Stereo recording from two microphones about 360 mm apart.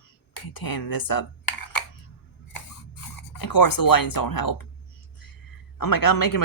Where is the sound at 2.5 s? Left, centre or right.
Left.